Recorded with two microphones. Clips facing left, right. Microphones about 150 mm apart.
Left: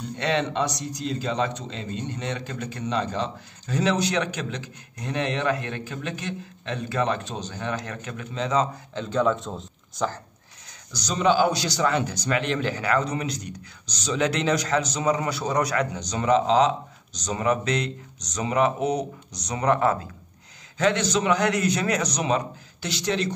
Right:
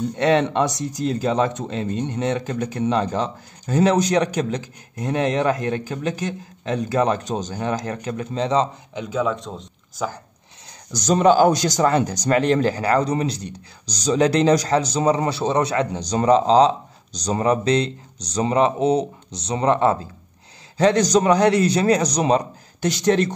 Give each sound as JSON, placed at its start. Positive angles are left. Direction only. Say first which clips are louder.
{"t": 0.2, "sound": "a man's voice", "louder": "right 6 dB", "side_deg": -50}
{"t": 8.9, "sound": "speech", "louder": "even", "side_deg": -15}
{"t": 9.2, "sound": "speech", "louder": "left 1 dB", "side_deg": 0}
{"t": 10.9, "sound": "a man's voice", "louder": "right 6 dB", "side_deg": -50}
{"t": 20.7, "sound": "a man's voice", "louder": "right 6 dB", "side_deg": -35}